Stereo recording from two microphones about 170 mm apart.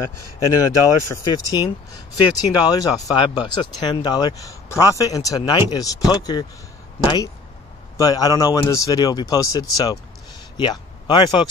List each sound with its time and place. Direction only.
0.6 s speech: 20° left (ahead or behind)
8.0 s speech: 20° left (ahead or behind)